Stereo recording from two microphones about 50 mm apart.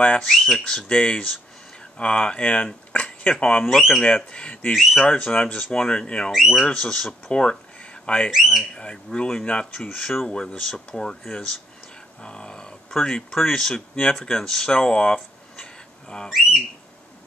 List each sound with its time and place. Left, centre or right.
0.3 s speech: centre
0.8 s speech: centre
3.6 s speech: centre
4.0 s speech: left
6.3 s speech: centre
6.6 s speech: centre
8.3 s speech: centre
8.7 s speech: centre
9.8 s speech: centre
10.2 s speech: centre
15.5 s a sound: centre